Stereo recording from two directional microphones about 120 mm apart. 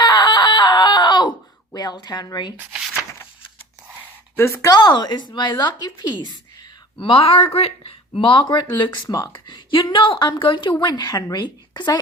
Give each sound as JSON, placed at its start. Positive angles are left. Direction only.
{"t": 0.0, "sound": "screaming", "side_deg": 35}
{"t": 1.7, "sound": "a woman's voice", "side_deg": 35}
{"t": 4.4, "sound": "speech", "side_deg": 20}
{"t": 4.7, "sound": "a woman's voice", "side_deg": 35}
{"t": 7.0, "sound": "speech", "side_deg": 50}
{"t": 8.8, "sound": "a woman's voice", "side_deg": 30}